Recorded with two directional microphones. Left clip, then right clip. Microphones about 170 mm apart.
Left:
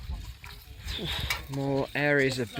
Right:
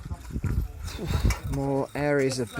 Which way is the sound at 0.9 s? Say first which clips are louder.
Left 2 dB; 5° right (ahead or behind).